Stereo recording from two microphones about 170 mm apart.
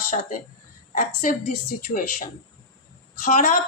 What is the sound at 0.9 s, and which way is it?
A man's voice, 55° left (ahead or behind).